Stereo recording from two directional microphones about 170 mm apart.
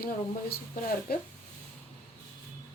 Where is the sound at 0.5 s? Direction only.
65° left (ahead or behind).